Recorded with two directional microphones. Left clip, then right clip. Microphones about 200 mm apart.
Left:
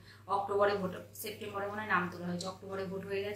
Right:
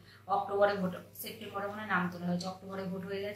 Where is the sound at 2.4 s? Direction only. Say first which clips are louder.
Left 1 dB; 5° left (ahead or behind).